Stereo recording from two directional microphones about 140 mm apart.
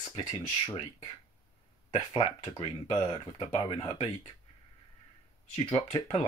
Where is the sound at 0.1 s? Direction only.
30° left (ahead or behind).